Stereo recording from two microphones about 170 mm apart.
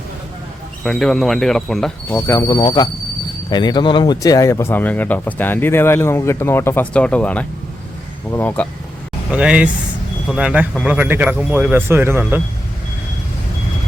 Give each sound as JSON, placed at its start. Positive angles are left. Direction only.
{"t": 0.9, "sound": "speech", "side_deg": 5}
{"t": 2.0, "sound": "speech", "side_deg": 15}
{"t": 9.3, "sound": "a man's voice", "side_deg": -5}